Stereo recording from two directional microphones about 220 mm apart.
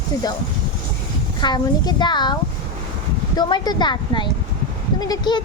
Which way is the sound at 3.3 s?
20° left (ahead or behind).